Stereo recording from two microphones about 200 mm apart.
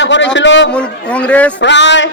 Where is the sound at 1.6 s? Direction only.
60° left (ahead or behind).